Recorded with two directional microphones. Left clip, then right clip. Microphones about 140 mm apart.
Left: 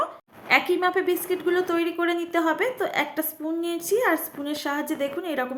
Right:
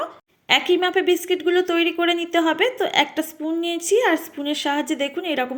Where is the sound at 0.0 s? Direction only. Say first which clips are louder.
Left 1 dB; 20° right (ahead or behind).